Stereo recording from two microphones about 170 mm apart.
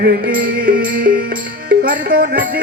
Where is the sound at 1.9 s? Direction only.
55° right (ahead or behind).